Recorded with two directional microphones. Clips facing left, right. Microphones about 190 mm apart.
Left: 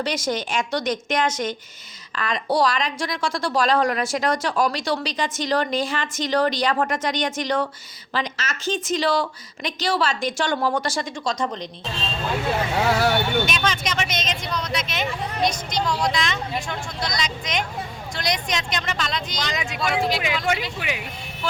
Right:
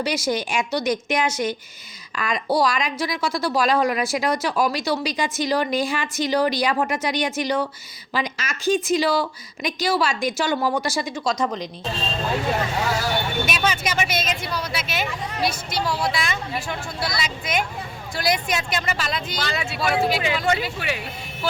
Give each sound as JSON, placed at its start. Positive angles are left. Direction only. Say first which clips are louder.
{"t": 0.0, "sound": "a woman's voice", "louder": "right 1 dB", "side_deg": -10}
{"t": 13.5, "sound": "a woman's voice", "louder": "right 1 dB", "side_deg": -5}
{"t": 19.5, "sound": "speech", "louder": "right 1 dB", "side_deg": 15}
{"t": 19.8, "sound": "speech", "louder": "right 2 dB", "side_deg": -5}
{"t": 20.7, "sound": "speech", "louder": "right 1 dB", "side_deg": 15}